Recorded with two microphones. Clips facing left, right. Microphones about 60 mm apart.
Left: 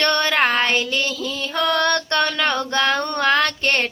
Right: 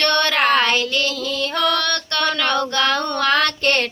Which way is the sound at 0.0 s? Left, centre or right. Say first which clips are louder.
Even; centre.